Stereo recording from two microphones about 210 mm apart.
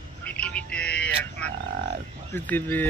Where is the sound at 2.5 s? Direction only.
10° left (ahead or behind).